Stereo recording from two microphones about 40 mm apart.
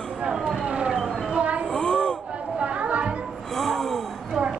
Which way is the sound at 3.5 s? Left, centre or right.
Centre.